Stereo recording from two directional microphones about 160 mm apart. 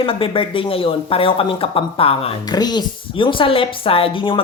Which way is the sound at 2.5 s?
25° left (ahead or behind).